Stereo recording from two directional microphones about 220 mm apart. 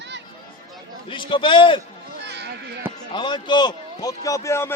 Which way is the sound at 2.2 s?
50° right (ahead or behind).